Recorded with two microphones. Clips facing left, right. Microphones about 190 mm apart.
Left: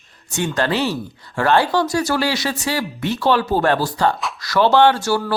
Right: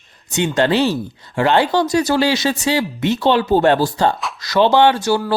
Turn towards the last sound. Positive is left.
turn(degrees=-15)  # may be behind; listen again after turning